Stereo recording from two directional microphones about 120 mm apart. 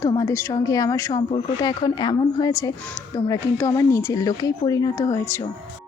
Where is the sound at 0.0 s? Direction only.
30° left (ahead or behind).